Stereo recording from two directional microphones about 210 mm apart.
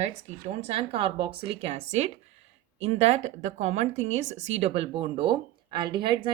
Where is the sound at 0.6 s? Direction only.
25° right (ahead or behind).